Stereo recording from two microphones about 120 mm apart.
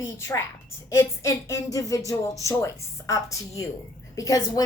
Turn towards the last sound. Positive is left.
turn(degrees=30)  # may be behind; listen again after turning